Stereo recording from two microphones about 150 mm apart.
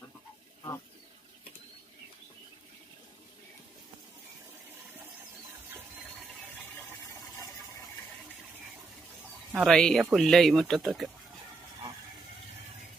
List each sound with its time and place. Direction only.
6.7 s toilet flush: 20° left (ahead or behind)
9.5 s speech: centre (ahead or behind)